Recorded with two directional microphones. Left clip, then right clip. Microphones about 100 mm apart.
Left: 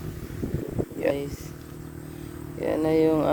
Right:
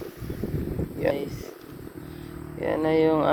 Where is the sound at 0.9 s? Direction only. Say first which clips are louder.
Even; 40° left (ahead or behind).